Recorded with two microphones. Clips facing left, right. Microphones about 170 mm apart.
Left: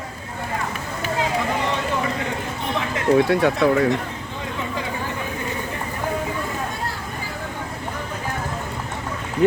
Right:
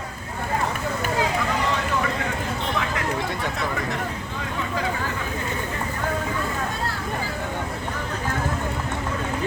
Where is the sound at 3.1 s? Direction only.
65° left (ahead or behind).